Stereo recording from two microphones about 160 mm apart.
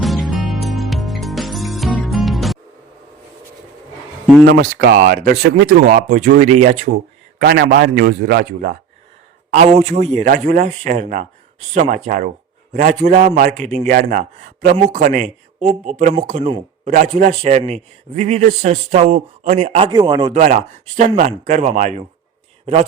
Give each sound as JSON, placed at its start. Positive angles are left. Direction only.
{"t": 0.0, "sound": "music", "side_deg": 0}
{"t": 4.4, "sound": "a man's voice", "side_deg": -80}
{"t": 5.8, "sound": "speech", "side_deg": -55}
{"t": 7.3, "sound": "a man's voice", "side_deg": -80}
{"t": 9.5, "sound": "speech", "side_deg": -45}
{"t": 14.6, "sound": "speech", "side_deg": -60}
{"t": 19.9, "sound": "a man's voice", "side_deg": -25}
{"t": 20.3, "sound": "speech", "side_deg": -45}